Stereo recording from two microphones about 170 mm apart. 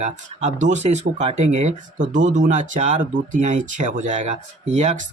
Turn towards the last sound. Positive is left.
turn(degrees=-45)  # may be behind; listen again after turning